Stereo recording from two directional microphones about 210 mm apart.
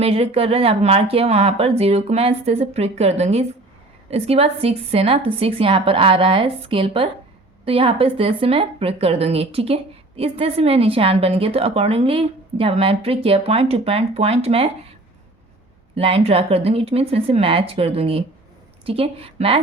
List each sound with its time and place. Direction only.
0.0 s speech: 25° right (ahead or behind)
16.0 s speech: 30° right (ahead or behind)